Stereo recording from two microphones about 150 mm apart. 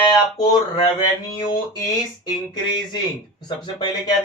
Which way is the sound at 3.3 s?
30° left (ahead or behind).